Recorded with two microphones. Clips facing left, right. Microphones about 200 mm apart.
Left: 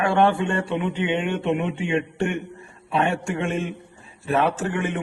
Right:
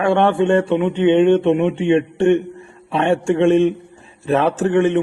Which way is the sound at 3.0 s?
25° right (ahead or behind).